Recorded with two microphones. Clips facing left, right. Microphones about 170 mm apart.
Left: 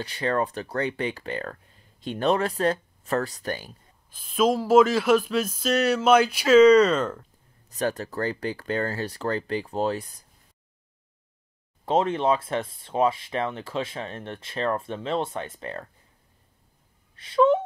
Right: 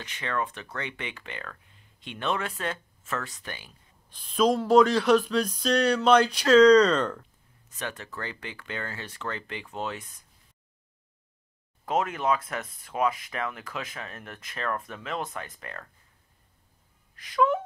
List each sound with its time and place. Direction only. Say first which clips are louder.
0.0 s speech: left 6 dB; 35° left (ahead or behind)
4.1 s speech: left 1 dB; 5° left (ahead or behind)
7.7 s speech: left 9 dB; 35° left (ahead or behind)
11.8 s speech: left 5 dB; 30° left (ahead or behind)
17.1 s a sound: left 5 dB; 30° left (ahead or behind)